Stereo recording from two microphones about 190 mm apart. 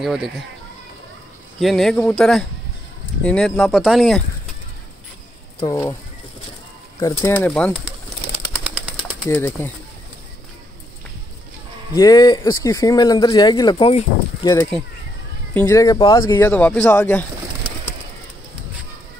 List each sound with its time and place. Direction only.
0.0 s speech: centre (ahead or behind)
1.6 s speech: centre (ahead or behind)
5.7 s speech: 20° left (ahead or behind)
7.0 s speech: 15° left (ahead or behind)
9.0 s speech: 10° left (ahead or behind)
11.9 s speech: 20° left (ahead or behind)
16.3 s speech: 10° left (ahead or behind)